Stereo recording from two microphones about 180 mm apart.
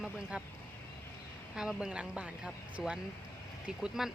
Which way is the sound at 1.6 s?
5° right (ahead or behind).